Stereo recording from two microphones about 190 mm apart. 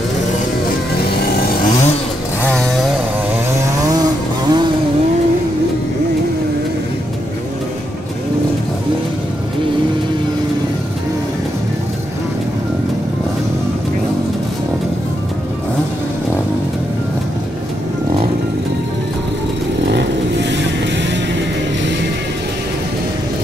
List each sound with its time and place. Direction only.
2.4 s chainsaw: 5° left (ahead or behind)
3.9 s chainsaw: 20° right (ahead or behind)
19.9 s vehicle: 65° right (ahead or behind)